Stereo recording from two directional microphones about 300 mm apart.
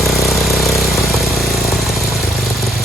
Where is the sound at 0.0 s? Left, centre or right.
Centre.